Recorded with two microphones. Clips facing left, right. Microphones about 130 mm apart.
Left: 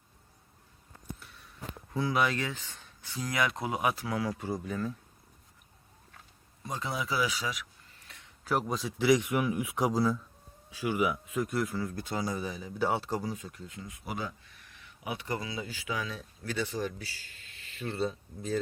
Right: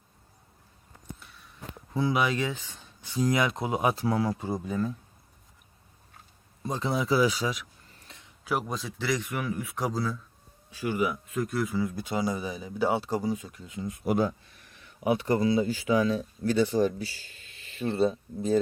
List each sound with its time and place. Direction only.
1.9 s speech: 20° right (ahead or behind)
6.7 s speech: 30° right (ahead or behind)
8.4 s a man's voice: centre (ahead or behind)
14.0 s speech: 50° right (ahead or behind); by 18.6 s 25° right (ahead or behind)